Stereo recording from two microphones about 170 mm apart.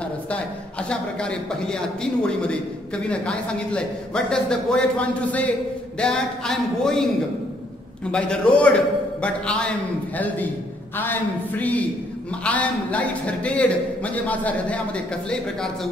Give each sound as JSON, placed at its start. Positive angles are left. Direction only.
{"t": 0.3, "sound": "a man's voice", "side_deg": 5}
{"t": 8.1, "sound": "a man's voice", "side_deg": 5}